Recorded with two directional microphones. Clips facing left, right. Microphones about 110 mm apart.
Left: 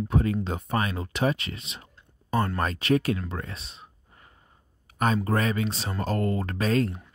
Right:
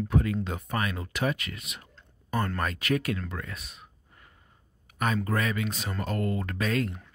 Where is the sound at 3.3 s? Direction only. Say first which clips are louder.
Left 3 dB; 25° left (ahead or behind).